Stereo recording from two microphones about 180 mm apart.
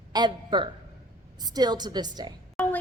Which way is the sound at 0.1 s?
25° right (ahead or behind).